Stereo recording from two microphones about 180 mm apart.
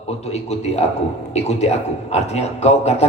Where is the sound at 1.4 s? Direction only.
35° left (ahead or behind).